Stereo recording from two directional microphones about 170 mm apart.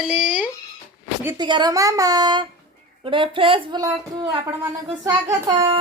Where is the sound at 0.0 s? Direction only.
5° right (ahead or behind).